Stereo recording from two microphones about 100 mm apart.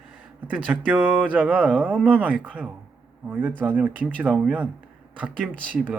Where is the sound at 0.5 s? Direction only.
15° right (ahead or behind).